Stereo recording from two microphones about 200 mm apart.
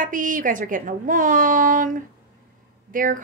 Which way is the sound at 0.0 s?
40° right (ahead or behind).